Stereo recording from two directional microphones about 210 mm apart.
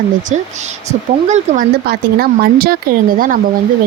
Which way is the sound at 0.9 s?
35° right (ahead or behind).